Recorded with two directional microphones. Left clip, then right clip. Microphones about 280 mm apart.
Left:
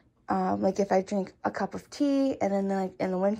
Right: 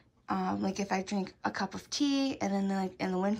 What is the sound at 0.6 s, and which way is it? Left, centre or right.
Speech, centre.